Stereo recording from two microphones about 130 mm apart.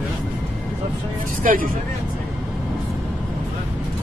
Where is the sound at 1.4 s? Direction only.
90° right.